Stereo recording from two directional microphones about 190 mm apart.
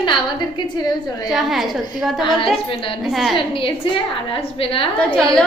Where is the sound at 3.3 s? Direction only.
25° left (ahead or behind).